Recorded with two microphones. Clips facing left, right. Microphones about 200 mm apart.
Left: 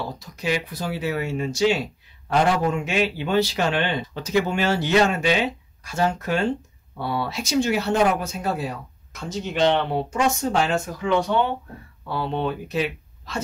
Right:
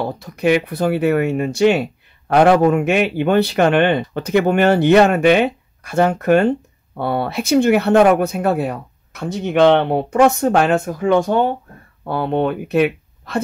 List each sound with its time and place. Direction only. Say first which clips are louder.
0.0 s speech: right 10 dB; 60° right (ahead or behind)